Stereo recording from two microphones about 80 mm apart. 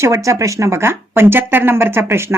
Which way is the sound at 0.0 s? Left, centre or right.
Right.